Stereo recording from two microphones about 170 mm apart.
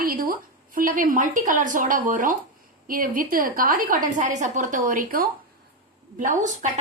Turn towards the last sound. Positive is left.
turn(degrees=-45)  # may be behind; listen again after turning